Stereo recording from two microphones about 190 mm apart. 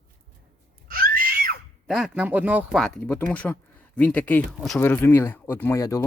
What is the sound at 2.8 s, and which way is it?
Speech, 10° left (ahead or behind).